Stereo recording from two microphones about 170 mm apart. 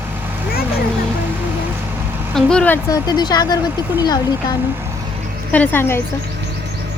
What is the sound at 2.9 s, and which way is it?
Speech, 25° left (ahead or behind).